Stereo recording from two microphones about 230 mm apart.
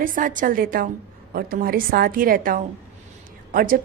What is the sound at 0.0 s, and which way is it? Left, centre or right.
A woman's voice, right.